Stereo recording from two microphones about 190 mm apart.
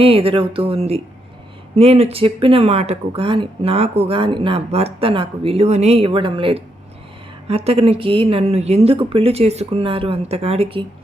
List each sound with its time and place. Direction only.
0.0 s speech: 30° right (ahead or behind)